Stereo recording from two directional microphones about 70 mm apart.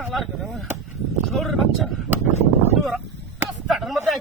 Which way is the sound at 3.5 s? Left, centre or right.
Centre.